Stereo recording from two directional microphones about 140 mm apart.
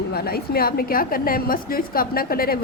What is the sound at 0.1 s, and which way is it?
A woman's voice, 90° left.